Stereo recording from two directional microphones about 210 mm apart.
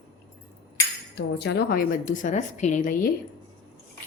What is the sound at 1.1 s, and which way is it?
A woman's voice, 55° left (ahead or behind).